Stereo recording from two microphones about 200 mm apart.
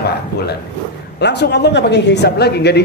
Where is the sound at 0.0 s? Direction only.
55° left (ahead or behind).